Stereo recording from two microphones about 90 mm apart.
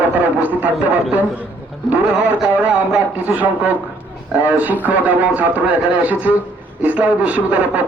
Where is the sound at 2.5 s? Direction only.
20° right (ahead or behind).